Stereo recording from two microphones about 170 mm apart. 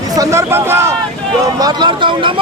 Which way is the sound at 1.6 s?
25° right (ahead or behind).